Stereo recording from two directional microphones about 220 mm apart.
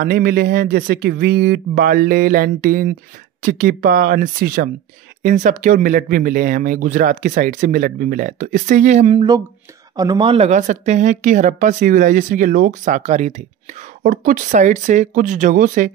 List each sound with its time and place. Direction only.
0.0 s a woman's voice: 40° right (ahead or behind)